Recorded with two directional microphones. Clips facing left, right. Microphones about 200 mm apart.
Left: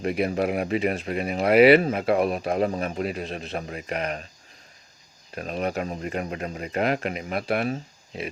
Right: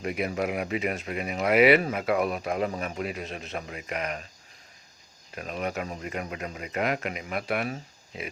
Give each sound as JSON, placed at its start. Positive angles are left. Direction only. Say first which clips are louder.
{"t": 0.0, "sound": "speech", "louder": "left 5 dB", "side_deg": 35}
{"t": 5.3, "sound": "speech", "louder": "left 4 dB", "side_deg": 35}